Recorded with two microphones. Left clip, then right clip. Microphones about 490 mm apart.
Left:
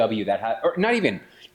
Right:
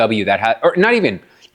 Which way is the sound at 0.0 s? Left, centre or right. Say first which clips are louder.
Right 8 dB; right.